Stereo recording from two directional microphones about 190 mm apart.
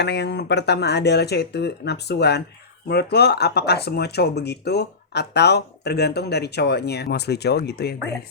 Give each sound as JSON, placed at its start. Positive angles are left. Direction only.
{"t": 0.0, "sound": "speech", "side_deg": 60}